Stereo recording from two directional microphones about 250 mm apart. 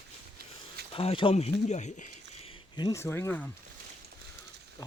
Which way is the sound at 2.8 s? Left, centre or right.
Centre.